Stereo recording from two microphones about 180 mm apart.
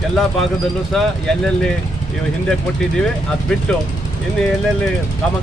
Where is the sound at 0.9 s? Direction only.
5° left (ahead or behind).